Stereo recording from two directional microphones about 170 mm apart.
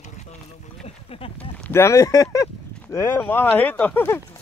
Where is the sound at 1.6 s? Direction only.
15° left (ahead or behind).